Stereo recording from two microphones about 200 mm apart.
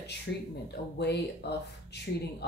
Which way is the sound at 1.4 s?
55° left (ahead or behind).